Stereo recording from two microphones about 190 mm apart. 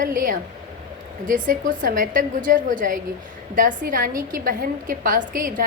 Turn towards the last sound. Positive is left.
turn(degrees=-45)  # may be behind; listen again after turning